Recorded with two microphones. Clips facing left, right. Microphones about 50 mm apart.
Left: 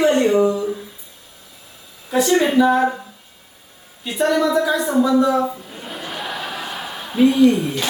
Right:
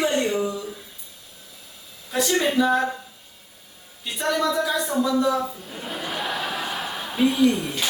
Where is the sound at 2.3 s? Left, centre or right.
Left.